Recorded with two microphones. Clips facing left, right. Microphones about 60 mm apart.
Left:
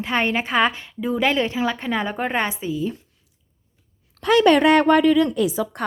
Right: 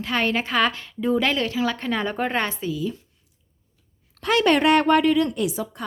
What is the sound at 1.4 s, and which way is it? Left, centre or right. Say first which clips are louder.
Speech: left 1 dB; left.